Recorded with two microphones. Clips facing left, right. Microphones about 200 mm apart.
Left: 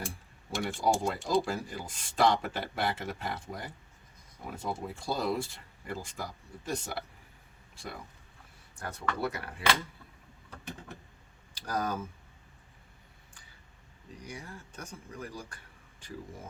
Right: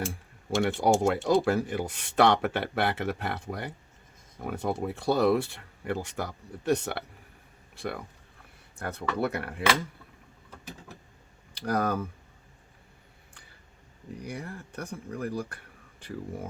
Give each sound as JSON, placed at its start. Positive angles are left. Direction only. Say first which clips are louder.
{"t": 0.6, "sound": "speech", "louder": "right 6 dB", "side_deg": -75}
{"t": 11.5, "sound": "speech", "louder": "right 6 dB", "side_deg": -60}
{"t": 14.3, "sound": "speech", "louder": "right 6 dB", "side_deg": -60}